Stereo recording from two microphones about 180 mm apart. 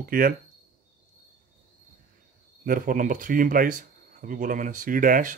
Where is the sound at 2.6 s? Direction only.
50° right (ahead or behind).